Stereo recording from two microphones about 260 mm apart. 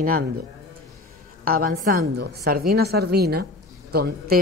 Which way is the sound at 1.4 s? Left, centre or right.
Right.